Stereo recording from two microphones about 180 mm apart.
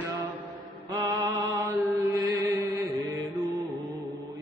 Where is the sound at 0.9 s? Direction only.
20° right (ahead or behind).